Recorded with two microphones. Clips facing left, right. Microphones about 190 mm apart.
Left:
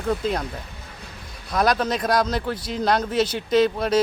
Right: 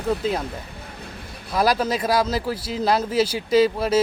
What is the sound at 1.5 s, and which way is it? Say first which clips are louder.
Speech: right 1 dB; 5° right (ahead or behind).